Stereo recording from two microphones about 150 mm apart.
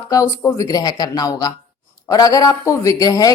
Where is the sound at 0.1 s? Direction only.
20° left (ahead or behind).